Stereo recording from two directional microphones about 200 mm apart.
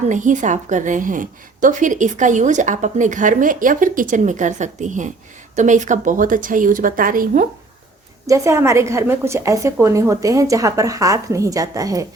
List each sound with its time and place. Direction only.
0.1 s a woman's voice: 40° right (ahead or behind)
8.3 s a woman's voice: 15° right (ahead or behind)